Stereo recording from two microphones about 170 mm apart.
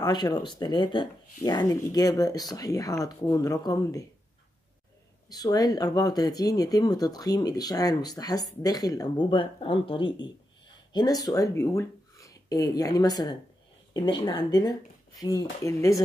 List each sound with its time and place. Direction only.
0.0 s speech: 25° left (ahead or behind)
5.3 s speech: 20° left (ahead or behind)